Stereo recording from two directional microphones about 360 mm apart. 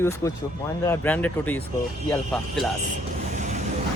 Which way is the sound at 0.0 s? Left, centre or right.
Centre.